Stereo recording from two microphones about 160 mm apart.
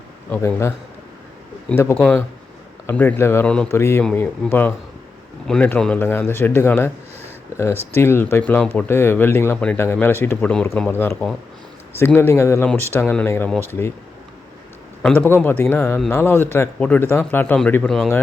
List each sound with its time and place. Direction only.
0.3 s speech: 15° left (ahead or behind)
1.7 s speech: 15° left (ahead or behind)
15.0 s speech: 10° left (ahead or behind)
17.8 s speech: centre (ahead or behind)